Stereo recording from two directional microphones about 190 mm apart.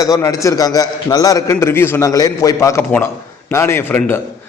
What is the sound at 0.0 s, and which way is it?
A man's voice, 20° left (ahead or behind).